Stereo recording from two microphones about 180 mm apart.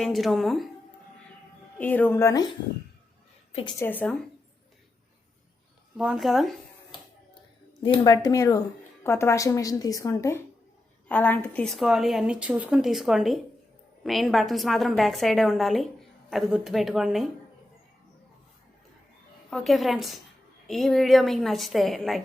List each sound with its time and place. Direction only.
0.0 s a woman's voice: centre (ahead or behind)
1.8 s a woman's voice: 10° left (ahead or behind)
3.5 s a woman's voice: 30° left (ahead or behind)
3.8 s a woman's voice: 10° left (ahead or behind)
6.0 s speech: 5° right (ahead or behind)
7.8 s a woman's voice: 25° left (ahead or behind); by 17.2 s centre (ahead or behind)
19.5 s a woman's voice: centre (ahead or behind)